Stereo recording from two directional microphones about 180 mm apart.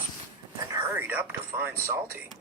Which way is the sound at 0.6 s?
15° right (ahead or behind).